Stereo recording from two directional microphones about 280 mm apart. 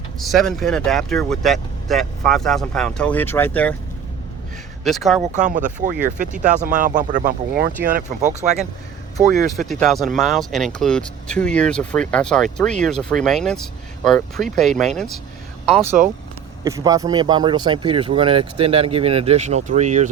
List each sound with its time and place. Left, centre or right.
0.2 s speech: centre
4.8 s speech: centre
5.2 s speech: right
9.6 s speech: centre; by 20.1 s right